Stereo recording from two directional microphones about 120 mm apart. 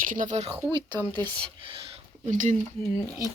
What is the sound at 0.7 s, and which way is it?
Speech, 40° right (ahead or behind).